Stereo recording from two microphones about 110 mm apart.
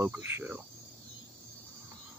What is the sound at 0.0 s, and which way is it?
Speech, 20° right (ahead or behind).